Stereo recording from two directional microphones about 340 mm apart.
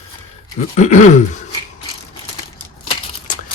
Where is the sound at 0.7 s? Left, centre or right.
Left.